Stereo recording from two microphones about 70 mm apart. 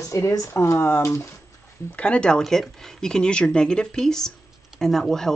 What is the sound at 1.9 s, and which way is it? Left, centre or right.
Speech, centre.